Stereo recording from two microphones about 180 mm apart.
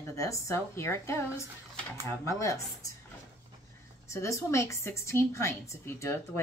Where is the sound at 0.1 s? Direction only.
15° left (ahead or behind).